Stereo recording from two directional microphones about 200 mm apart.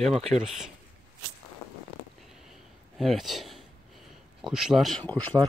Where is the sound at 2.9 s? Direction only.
Centre (ahead or behind).